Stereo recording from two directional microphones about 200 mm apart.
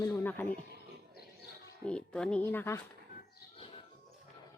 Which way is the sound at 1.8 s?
5° left (ahead or behind).